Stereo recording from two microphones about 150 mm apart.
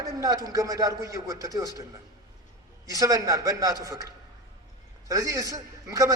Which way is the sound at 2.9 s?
20° right (ahead or behind).